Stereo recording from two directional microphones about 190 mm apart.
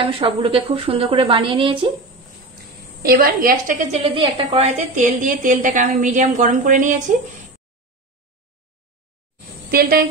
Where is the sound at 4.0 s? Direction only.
30° right (ahead or behind).